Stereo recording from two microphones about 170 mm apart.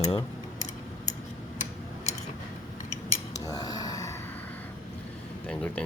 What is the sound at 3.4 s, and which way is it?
Gasp, 20° left (ahead or behind).